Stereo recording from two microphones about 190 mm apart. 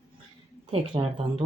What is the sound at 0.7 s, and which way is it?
Speech, 30° right (ahead or behind).